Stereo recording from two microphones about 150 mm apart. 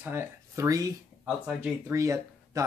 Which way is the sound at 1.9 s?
20° right (ahead or behind).